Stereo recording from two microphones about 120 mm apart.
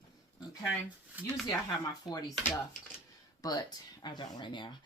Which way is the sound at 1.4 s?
35° left (ahead or behind).